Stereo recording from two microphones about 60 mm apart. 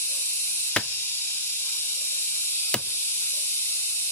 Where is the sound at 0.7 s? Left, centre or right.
Centre.